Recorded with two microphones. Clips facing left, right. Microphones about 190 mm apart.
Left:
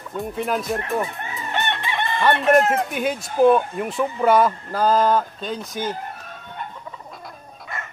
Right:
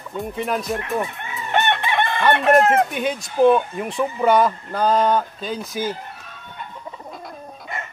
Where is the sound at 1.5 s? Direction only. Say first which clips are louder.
Right 6 dB; 60° right (ahead or behind).